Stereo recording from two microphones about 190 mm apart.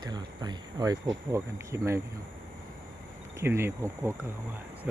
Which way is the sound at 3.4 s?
15° right (ahead or behind).